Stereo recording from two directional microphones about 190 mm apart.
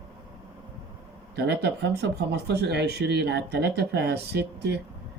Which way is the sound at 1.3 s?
65° right (ahead or behind).